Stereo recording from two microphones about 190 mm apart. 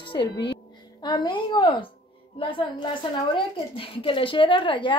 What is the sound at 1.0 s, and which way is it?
A woman's voice, 25° left (ahead or behind).